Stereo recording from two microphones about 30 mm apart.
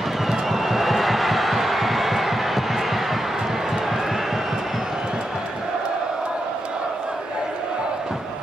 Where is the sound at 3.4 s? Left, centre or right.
Centre.